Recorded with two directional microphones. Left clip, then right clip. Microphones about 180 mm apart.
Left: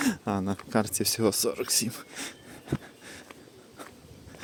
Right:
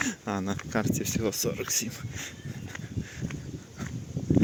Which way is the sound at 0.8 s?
35° left (ahead or behind).